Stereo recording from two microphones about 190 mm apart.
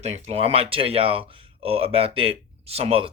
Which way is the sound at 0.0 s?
35° right (ahead or behind).